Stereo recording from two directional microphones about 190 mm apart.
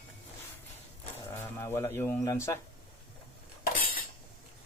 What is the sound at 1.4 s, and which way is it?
Speech, 15° left (ahead or behind).